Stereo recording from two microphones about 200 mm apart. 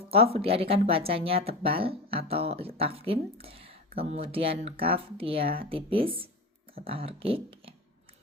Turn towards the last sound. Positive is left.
turn(degrees=-30)  # may be behind; listen again after turning